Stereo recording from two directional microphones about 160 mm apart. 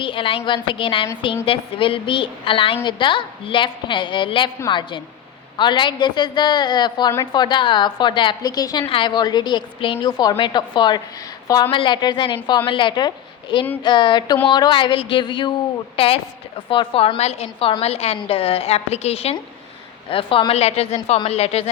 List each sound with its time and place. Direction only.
0.0 s a woman's voice: 35° left (ahead or behind)